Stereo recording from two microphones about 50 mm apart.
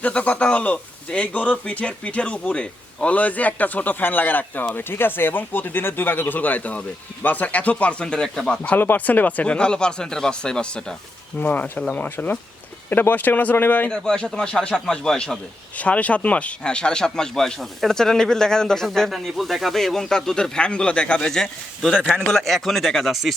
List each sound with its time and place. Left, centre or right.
0.0 s a man's voice: left
8.7 s speech: left; by 10.9 s centre
11.3 s a man's voice: left
13.9 s speech: centre
15.8 s speech: left; by 18.9 s centre
19.1 s speech: centre
22.3 s speech: centre